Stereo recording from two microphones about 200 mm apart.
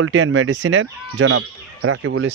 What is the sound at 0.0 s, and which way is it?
Speech, 75° right (ahead or behind).